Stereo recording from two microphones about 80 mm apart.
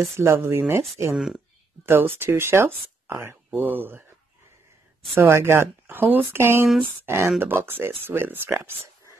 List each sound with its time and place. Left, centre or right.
0.1 s speech: right
1.1 s speech: centre
1.9 s speech: right
5.1 s speech: right